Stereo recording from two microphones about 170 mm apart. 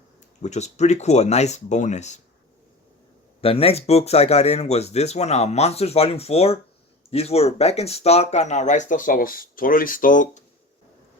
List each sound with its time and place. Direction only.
0.4 s speech: 40° left (ahead or behind)
3.4 s speech: 35° left (ahead or behind); by 10.4 s 50° left (ahead or behind)